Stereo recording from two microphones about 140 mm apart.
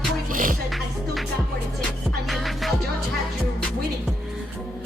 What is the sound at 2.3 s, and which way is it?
Music, centre (ahead or behind).